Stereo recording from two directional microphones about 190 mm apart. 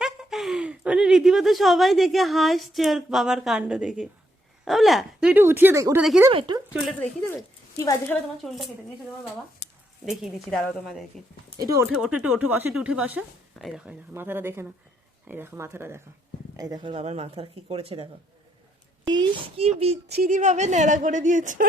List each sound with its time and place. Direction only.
0.0 s speech: centre (ahead or behind)
6.0 s speech: 5° right (ahead or behind)
6.3 s speech: 25° right (ahead or behind)
6.7 s speech: centre (ahead or behind)
8.1 s speech: centre (ahead or behind)
9.6 s a sound: 65° left (ahead or behind)
10.1 s speech: centre (ahead or behind)
11.6 s speech: 15° right (ahead or behind)
11.9 s a woman's voice: 5° right (ahead or behind); by 20.0 s 30° right (ahead or behind)
20.1 s a woman's voice: 50° right (ahead or behind)